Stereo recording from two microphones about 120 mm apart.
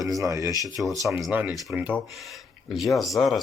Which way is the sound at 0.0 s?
30° right (ahead or behind).